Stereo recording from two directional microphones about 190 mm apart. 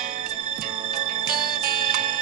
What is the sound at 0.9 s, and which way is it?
Music, 50° right (ahead or behind).